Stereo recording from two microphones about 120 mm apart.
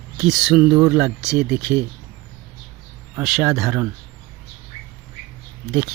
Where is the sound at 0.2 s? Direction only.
5° right (ahead or behind).